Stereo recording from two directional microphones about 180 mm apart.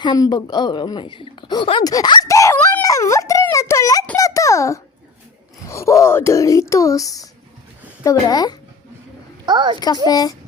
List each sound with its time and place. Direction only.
0.0 s speech: 25° left (ahead or behind)
4.2 s a sound: 20° left (ahead or behind)
5.6 s a child's voice: 15° left (ahead or behind)
9.5 s a child's voice: 25° right (ahead or behind)
10.1 s a woman's voice: 20° left (ahead or behind)